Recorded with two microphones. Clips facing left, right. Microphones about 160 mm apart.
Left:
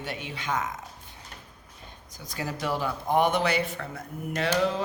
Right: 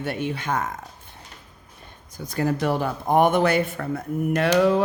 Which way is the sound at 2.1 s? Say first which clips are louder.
Right 10 dB; 50° right (ahead or behind).